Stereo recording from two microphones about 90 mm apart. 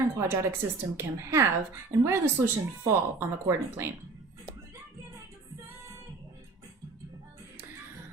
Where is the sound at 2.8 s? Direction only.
30° right (ahead or behind).